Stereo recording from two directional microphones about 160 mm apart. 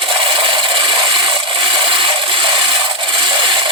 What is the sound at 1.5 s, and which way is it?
Wood, 35° right (ahead or behind).